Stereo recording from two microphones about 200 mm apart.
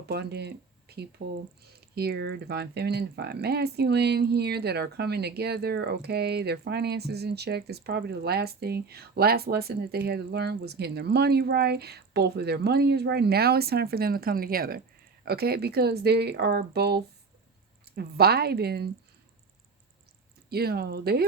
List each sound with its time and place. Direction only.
0.0 s speech: 55° right (ahead or behind)
20.5 s speech: 50° right (ahead or behind)